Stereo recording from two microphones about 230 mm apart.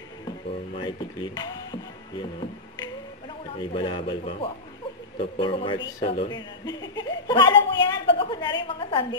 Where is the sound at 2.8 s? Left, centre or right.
Left.